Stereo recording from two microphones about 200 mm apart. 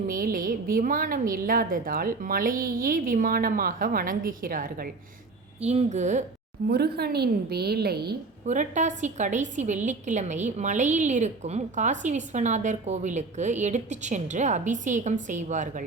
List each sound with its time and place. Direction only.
0.1 s a woman's voice: 45° right (ahead or behind)
5.5 s a woman's voice: 35° right (ahead or behind)
6.7 s a woman's voice: 50° right (ahead or behind)
8.4 s a woman's voice: 35° right (ahead or behind)